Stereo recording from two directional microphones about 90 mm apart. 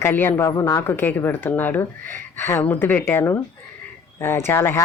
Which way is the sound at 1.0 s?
20° left (ahead or behind).